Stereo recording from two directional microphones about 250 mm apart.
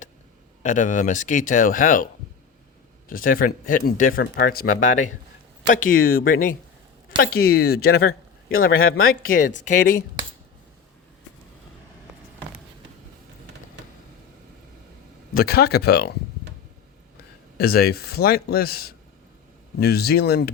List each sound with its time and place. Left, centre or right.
0.6 s speech: left
3.1 s speech: left
15.4 s speech: left
17.6 s speech: left